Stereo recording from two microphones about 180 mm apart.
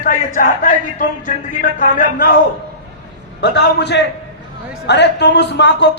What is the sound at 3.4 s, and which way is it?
A man's voice, 70° left (ahead or behind).